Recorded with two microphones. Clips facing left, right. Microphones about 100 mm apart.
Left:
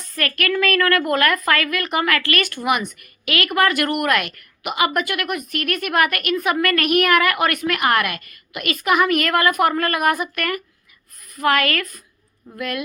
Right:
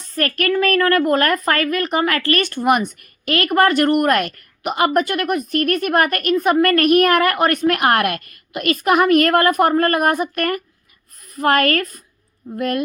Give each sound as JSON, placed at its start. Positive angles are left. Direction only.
{"t": 0.2, "sound": "a woman's voice", "side_deg": -40}
{"t": 7.8, "sound": "a woman's voice", "side_deg": -50}